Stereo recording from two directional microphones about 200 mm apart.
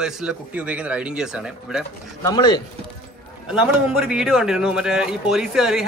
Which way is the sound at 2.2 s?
20° left (ahead or behind).